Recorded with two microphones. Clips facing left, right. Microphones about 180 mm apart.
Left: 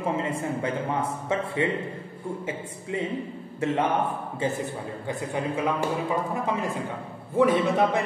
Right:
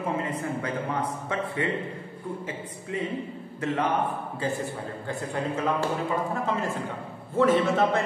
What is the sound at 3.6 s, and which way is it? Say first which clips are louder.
Speech: left 2 dB; 25° left (ahead or behind).